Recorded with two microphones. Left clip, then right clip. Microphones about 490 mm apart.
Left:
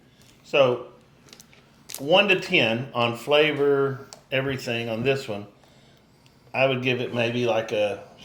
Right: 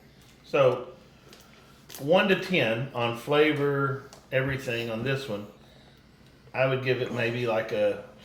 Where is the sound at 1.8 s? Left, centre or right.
Left.